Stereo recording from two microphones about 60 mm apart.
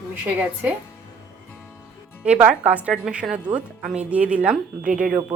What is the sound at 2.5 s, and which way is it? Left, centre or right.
A woman's voice, right.